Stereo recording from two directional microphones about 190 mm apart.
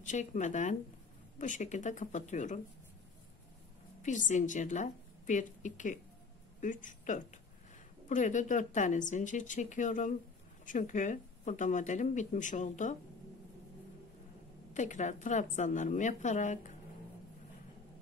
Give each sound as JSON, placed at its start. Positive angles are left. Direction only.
{"t": 0.0, "sound": "speech", "side_deg": 40}
{"t": 4.0, "sound": "a woman's voice", "side_deg": 40}
{"t": 14.7, "sound": "speech", "side_deg": 40}